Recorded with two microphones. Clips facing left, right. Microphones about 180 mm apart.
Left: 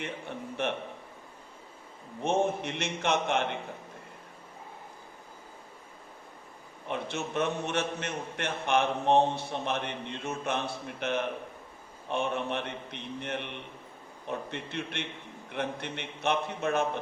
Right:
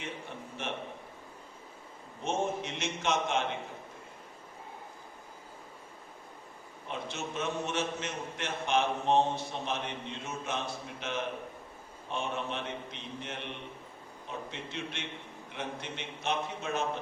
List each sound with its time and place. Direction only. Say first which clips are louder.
0.6 s a man's voice: left 7 dB; 60° left (ahead or behind)
2.2 s a man's voice: left 5 dB; 60° left (ahead or behind)
6.8 s a man's voice: left 4 dB; 60° left (ahead or behind)